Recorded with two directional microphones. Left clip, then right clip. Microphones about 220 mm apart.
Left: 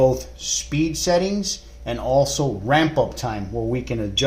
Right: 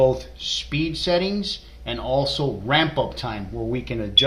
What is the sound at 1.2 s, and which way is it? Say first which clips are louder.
Speech: left 1 dB; 50° left (ahead or behind).